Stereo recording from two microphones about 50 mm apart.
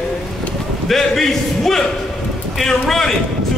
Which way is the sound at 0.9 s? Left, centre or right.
Centre.